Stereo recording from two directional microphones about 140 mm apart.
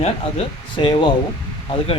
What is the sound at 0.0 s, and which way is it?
Speech, 45° left (ahead or behind).